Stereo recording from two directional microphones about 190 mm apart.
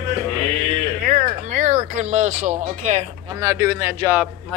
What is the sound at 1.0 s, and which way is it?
Speech, 50° right (ahead or behind).